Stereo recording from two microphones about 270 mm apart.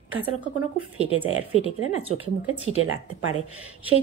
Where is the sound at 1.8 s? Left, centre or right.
Right.